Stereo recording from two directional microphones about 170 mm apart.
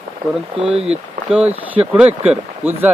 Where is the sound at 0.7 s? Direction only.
35° right (ahead or behind).